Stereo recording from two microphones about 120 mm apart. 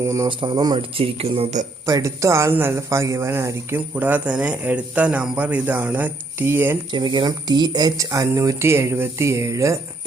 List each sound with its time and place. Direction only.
0.0 s speech: 25° right (ahead or behind)
0.3 s speech: 45° right (ahead or behind)
0.9 s speech: 55° right (ahead or behind)
1.9 s speech: 25° right (ahead or behind)
6.9 s speech: 40° right (ahead or behind)